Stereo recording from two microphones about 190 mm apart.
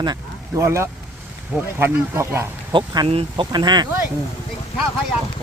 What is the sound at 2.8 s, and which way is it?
Speech, 30° right (ahead or behind).